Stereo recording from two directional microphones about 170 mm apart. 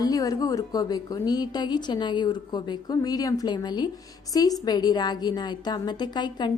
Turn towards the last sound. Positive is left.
turn(degrees=25)  # may be behind; listen again after turning